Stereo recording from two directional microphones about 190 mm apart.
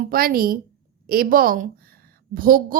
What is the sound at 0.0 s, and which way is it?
A woman's voice, 50° right (ahead or behind).